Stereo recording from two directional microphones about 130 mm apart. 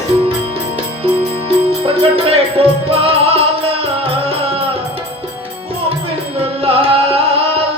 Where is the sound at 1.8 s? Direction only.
45° right (ahead or behind).